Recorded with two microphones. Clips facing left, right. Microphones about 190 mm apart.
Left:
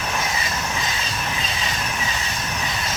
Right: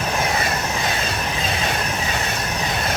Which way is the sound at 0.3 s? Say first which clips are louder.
Right 4 dB; 60° right (ahead or behind).